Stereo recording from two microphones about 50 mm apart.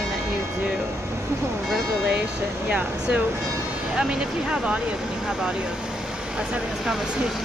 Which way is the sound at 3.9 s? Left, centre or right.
Centre.